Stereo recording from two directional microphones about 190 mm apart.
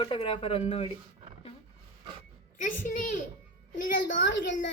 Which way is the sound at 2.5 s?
45° left (ahead or behind).